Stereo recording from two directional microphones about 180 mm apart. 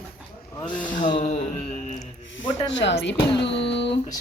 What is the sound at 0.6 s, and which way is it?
Speech, 5° left (ahead or behind).